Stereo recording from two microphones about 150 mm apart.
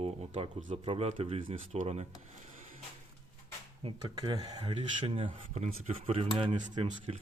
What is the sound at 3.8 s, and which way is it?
Speech, 40° right (ahead or behind).